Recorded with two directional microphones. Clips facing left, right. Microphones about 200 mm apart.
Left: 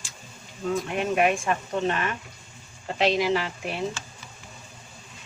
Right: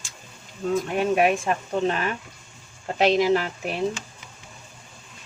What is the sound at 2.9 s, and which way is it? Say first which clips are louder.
Speech: right 4 dB; 45° right (ahead or behind).